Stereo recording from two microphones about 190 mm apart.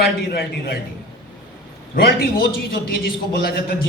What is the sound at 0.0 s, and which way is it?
Speech, 55° left (ahead or behind).